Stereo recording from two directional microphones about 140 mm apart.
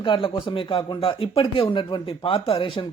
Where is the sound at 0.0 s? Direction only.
35° left (ahead or behind).